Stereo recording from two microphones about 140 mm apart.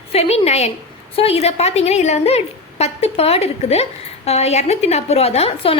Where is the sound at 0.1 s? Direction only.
45° left (ahead or behind).